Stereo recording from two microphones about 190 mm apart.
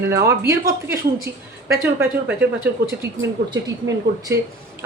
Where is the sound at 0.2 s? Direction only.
15° right (ahead or behind).